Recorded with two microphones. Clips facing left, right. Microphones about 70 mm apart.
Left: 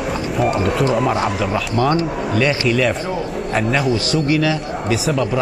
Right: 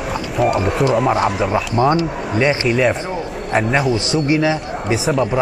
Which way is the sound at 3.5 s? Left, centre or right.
Centre.